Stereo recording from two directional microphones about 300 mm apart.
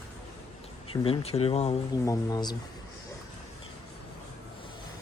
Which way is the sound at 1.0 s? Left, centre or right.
Centre.